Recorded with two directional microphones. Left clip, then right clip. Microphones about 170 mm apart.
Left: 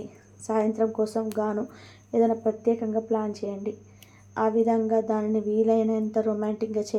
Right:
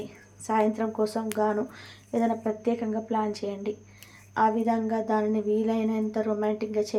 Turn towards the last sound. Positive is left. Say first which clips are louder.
# even
turn(degrees=-15)  # may be behind; listen again after turning